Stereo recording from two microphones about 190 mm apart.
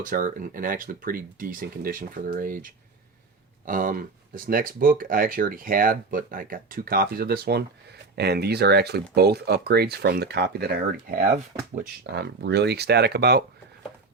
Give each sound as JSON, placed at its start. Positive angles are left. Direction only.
{"t": 0.0, "sound": "speech", "side_deg": -45}
{"t": 12.1, "sound": "speech", "side_deg": -60}